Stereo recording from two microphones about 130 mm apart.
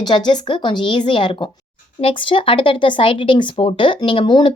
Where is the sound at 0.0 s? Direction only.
35° left (ahead or behind).